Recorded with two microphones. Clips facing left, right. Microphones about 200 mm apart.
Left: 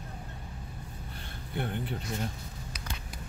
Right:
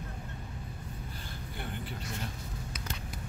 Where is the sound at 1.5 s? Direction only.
55° left (ahead or behind).